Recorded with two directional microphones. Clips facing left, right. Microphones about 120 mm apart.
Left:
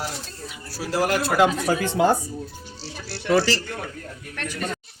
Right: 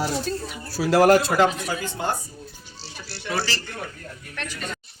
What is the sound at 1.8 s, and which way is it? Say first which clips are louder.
Speech: left 9 dB; 70° left (ahead or behind).